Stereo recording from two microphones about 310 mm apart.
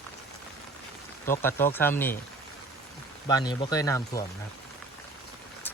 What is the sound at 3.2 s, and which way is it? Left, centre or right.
Speech, centre.